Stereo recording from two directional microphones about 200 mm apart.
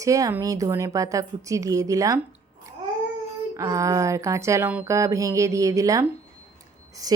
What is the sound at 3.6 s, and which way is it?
A woman's voice, 15° right (ahead or behind).